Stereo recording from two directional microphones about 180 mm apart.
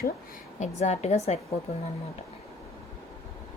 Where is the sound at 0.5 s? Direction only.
40° left (ahead or behind).